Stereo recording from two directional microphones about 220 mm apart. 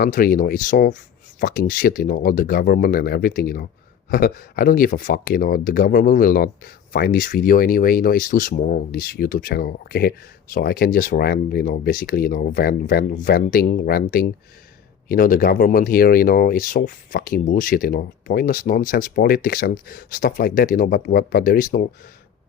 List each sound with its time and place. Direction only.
0.0 s speech: 40° left (ahead or behind)